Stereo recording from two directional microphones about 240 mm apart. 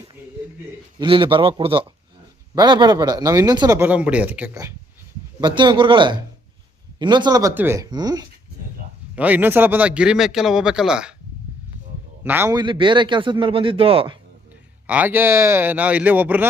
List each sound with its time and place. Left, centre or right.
0.9 s a man's voice: right; by 11.1 s centre
12.2 s a man's voice: centre
14.8 s speech: centre